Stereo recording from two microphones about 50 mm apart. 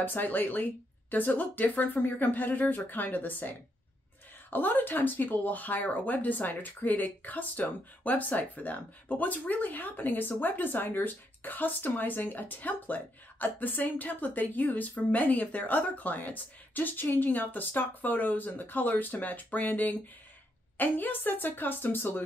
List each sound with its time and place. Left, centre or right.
0.0 s speech: left